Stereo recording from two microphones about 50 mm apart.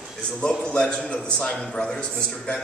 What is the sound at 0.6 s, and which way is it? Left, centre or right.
A man's voice, left.